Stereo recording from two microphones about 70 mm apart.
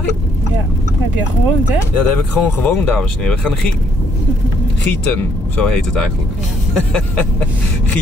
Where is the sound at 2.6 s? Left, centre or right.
Left.